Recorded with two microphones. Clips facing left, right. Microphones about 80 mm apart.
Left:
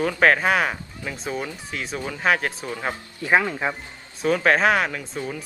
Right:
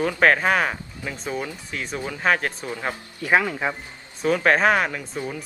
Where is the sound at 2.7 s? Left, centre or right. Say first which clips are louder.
Even; centre.